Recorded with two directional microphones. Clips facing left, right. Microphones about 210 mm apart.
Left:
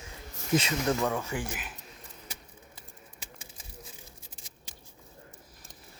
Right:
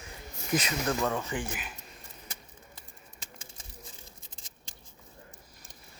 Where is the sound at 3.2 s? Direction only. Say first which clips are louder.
Right 1 dB; 10° left (ahead or behind).